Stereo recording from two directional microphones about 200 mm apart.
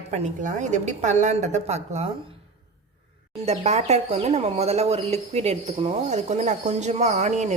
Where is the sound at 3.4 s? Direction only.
30° right (ahead or behind).